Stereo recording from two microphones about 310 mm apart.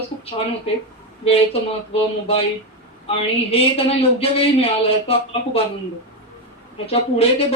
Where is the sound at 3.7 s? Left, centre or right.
Centre.